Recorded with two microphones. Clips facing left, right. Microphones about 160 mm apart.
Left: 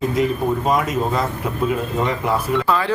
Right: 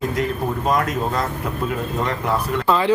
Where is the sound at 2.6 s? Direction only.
20° right (ahead or behind).